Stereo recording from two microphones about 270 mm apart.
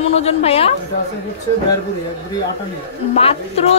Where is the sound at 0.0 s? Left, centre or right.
Left.